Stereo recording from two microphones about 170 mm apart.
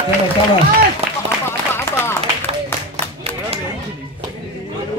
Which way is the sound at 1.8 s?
15° left (ahead or behind).